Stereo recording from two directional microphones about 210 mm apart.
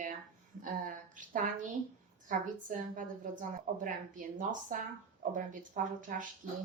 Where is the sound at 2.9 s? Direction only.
40° right (ahead or behind).